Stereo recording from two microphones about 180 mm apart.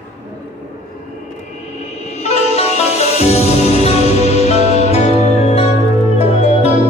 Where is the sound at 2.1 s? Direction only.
35° left (ahead or behind).